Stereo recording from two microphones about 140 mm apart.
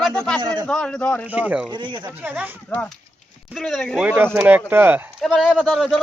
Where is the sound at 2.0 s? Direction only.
15° right (ahead or behind).